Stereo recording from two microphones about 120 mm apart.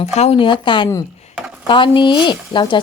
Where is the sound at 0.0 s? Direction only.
60° left (ahead or behind).